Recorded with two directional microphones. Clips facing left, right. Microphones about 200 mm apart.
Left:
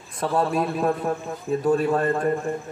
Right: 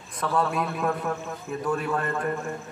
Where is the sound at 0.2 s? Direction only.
25° left (ahead or behind).